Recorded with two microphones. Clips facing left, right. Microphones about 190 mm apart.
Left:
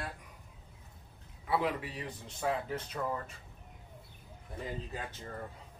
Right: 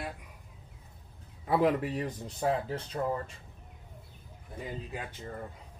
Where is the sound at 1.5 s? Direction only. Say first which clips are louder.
Right 6 dB; 45° right (ahead or behind).